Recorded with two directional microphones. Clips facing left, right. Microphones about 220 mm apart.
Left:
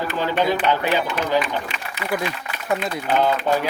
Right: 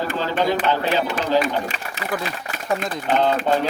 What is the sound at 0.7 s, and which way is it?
Speech, 15° left (ahead or behind).